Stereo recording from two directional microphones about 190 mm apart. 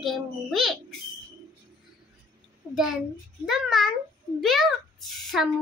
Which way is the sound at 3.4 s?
Centre (ahead or behind).